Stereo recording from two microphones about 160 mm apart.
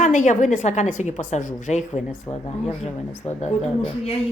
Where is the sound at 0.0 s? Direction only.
50° left (ahead or behind).